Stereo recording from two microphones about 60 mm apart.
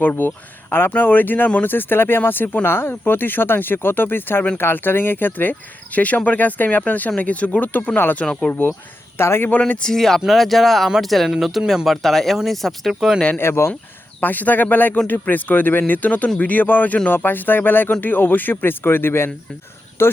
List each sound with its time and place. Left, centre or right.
0.0 s speech: left
8.2 s speech: centre
8.4 s speech: left
9.1 s speech: left
9.5 s speech: left
9.8 s speech: centre
11.9 s speech: centre
12.9 s speech: centre
13.1 s speech: centre
13.4 s speech: left
14.2 s speech: left